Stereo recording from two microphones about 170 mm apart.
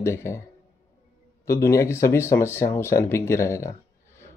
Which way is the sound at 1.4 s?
20° left (ahead or behind).